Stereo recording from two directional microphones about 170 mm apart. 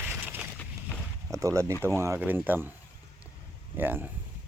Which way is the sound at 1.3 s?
20° right (ahead or behind).